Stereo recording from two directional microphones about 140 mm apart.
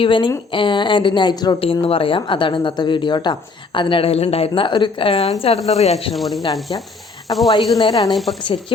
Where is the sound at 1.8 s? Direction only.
40° left (ahead or behind).